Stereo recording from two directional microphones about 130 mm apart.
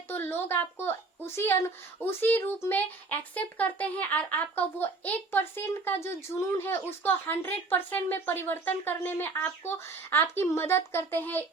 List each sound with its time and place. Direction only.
0.1 s a child's voice: 15° left (ahead or behind)